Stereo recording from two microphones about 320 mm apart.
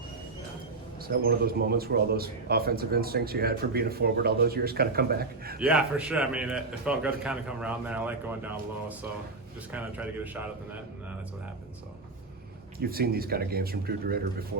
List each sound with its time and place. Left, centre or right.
1.0 s speech: right
5.5 s a man's voice: centre
12.8 s speech: right